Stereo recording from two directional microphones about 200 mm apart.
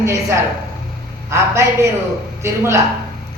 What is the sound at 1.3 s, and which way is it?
Speech, 15° right (ahead or behind).